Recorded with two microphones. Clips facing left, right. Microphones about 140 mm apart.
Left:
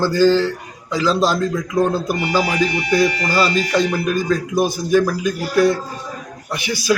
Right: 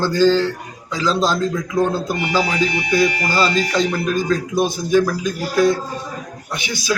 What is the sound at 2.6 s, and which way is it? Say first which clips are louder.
Speech: left 1 dB; 50° left (ahead or behind).